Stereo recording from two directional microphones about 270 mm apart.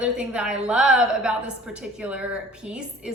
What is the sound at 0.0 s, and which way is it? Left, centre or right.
A woman's voice, centre.